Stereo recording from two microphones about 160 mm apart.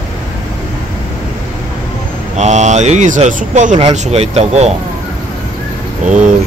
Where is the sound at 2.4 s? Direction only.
45° right (ahead or behind).